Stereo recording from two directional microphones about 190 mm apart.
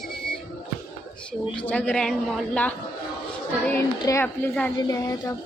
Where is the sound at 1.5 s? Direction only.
10° left (ahead or behind).